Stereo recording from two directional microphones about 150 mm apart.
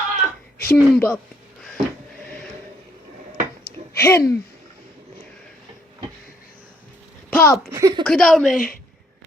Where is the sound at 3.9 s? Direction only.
20° left (ahead or behind).